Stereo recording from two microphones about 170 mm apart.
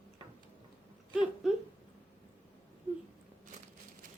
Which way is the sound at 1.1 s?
5° right (ahead or behind).